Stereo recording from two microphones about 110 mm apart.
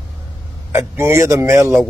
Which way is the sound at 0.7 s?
25° right (ahead or behind).